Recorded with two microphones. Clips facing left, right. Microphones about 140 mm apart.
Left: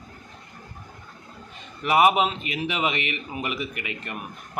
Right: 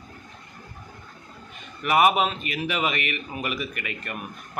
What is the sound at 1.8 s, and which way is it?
A man's voice, 20° left (ahead or behind).